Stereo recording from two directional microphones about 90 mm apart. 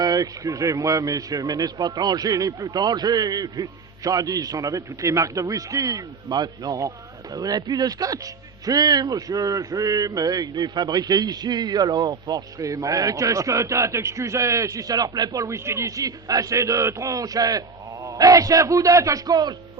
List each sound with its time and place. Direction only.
0.0 s speech: 45° right (ahead or behind)